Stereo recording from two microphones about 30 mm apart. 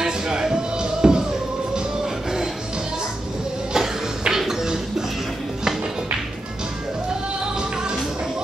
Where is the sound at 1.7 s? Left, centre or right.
Centre.